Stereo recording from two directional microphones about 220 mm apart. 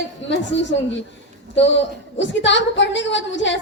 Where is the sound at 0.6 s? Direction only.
55° left (ahead or behind).